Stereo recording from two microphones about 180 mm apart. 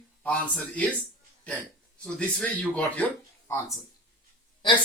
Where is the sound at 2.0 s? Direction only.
5° left (ahead or behind).